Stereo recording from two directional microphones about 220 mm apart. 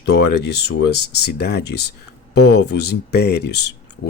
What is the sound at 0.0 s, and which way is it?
Speech, 50° left (ahead or behind).